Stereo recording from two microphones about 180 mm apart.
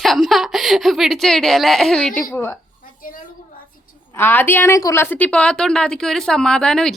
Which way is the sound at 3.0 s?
50° left (ahead or behind).